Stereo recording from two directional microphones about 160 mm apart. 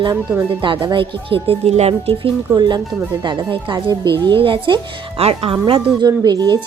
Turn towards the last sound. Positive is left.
turn(degrees=-25)  # may be behind; listen again after turning